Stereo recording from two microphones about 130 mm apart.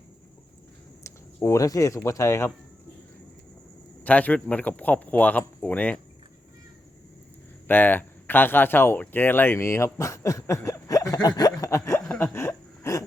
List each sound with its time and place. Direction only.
1.0 s speech: 20° left (ahead or behind)
4.0 s speech: 10° left (ahead or behind)
7.7 s speech: 15° left (ahead or behind)
12.2 s a sound: 20° left (ahead or behind)